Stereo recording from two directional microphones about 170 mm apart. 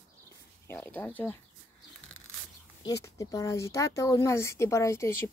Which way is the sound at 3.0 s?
20° left (ahead or behind).